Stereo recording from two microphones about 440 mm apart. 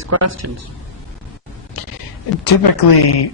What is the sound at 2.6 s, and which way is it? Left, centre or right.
Speech, left.